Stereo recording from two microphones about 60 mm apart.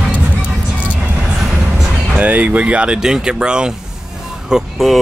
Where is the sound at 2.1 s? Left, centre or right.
Right.